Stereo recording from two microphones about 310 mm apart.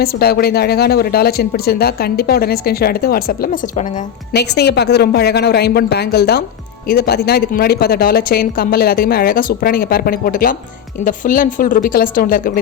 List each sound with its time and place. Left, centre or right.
0.0 s a woman's voice: left